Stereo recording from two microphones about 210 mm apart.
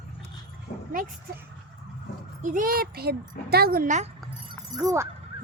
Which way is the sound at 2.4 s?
40° right (ahead or behind).